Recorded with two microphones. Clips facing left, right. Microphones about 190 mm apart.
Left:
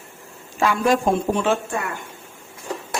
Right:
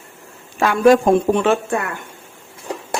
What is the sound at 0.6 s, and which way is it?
A woman's voice, 65° right (ahead or behind).